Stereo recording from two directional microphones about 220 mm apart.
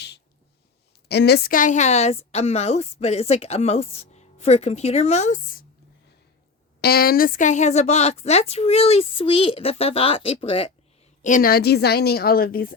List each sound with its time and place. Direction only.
1.0 s a woman's voice: 50° left (ahead or behind)
6.8 s a woman's voice: 45° left (ahead or behind); by 10.7 s 25° left (ahead or behind)
11.2 s a woman's voice: 35° left (ahead or behind)